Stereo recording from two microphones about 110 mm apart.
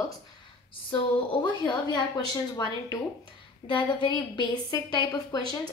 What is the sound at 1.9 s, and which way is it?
Speech, 40° left (ahead or behind).